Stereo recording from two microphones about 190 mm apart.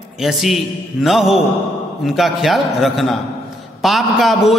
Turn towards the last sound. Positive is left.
turn(degrees=0)  # may be behind; listen again after turning